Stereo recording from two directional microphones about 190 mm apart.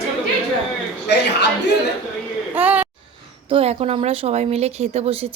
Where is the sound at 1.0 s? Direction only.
60° left (ahead or behind).